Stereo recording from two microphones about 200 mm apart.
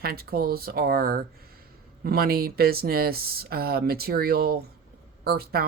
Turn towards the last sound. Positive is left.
turn(degrees=-50)  # may be behind; listen again after turning